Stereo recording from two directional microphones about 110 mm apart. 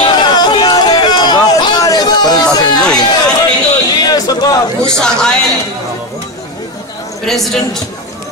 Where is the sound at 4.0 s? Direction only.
35° left (ahead or behind).